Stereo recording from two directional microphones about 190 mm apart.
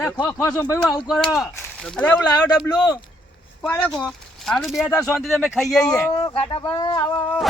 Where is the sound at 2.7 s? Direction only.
20° left (ahead or behind).